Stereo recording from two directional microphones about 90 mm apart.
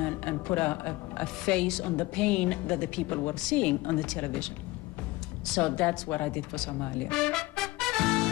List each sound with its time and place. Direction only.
0.0 s a woman's voice: 15° left (ahead or behind)
5.5 s a woman's voice: 10° left (ahead or behind)
6.8 s music: 15° left (ahead or behind)